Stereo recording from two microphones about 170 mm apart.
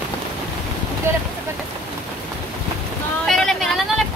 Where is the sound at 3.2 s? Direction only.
Centre (ahead or behind).